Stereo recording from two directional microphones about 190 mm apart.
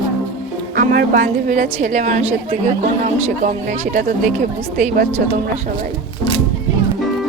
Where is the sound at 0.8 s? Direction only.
50° right (ahead or behind).